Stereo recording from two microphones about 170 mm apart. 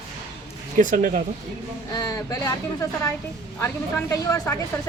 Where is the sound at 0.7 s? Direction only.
50° right (ahead or behind).